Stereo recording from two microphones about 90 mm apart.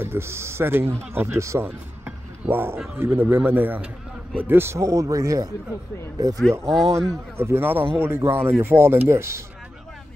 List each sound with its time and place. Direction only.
0.0 s speech: 30° right (ahead or behind); by 6.4 s 45° right (ahead or behind)
6.7 s speech: 5° left (ahead or behind)
7.3 s speech: 25° right (ahead or behind)